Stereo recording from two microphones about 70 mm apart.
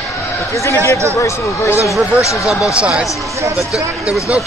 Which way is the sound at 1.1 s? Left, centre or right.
Left.